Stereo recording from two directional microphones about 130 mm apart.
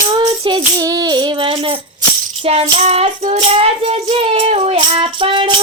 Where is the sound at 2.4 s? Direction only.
50° right (ahead or behind).